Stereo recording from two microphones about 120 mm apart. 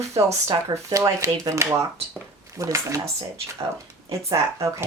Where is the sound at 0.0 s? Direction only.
25° right (ahead or behind).